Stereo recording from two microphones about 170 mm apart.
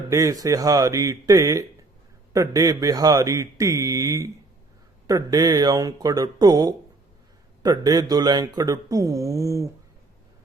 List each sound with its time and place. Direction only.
0.1 s speech: 20° right (ahead or behind)